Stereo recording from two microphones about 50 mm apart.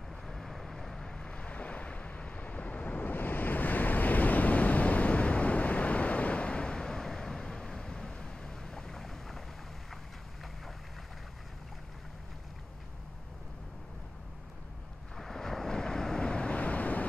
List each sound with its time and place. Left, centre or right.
0.3 s vehicle: centre
1.3 s vehicle: left; by 9.4 s centre
15.1 s vehicle: centre; by 17.0 s left